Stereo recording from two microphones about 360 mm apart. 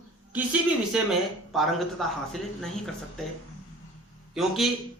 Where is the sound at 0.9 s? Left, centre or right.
Centre.